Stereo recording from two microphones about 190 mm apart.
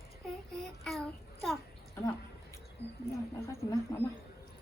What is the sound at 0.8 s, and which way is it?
Child singing, centre (ahead or behind).